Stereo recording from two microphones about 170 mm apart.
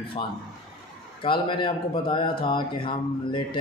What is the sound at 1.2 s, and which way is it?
Speech, 30° left (ahead or behind).